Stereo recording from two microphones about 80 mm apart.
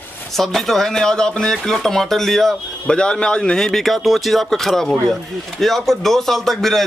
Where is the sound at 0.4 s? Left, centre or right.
Centre.